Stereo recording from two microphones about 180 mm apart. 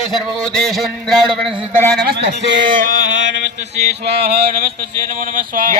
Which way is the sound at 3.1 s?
90° right.